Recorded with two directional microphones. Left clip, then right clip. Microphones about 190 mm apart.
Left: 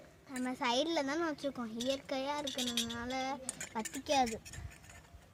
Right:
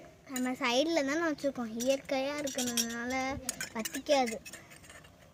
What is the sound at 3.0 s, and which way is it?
Speech, 5° left (ahead or behind).